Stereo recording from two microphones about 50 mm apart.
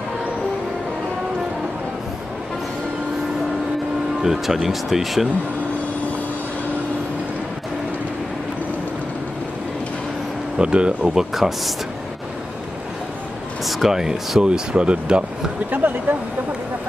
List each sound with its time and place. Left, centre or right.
4.2 s speech: centre
10.6 s speech: centre
11.1 s speech: centre
13.7 s speech: centre; by 15.2 s right
15.7 s speech: right